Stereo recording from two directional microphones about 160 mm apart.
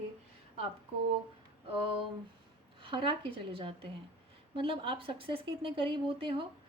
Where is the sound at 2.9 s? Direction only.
30° right (ahead or behind).